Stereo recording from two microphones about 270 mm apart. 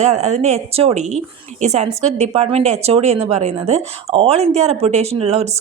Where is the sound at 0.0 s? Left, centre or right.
Right.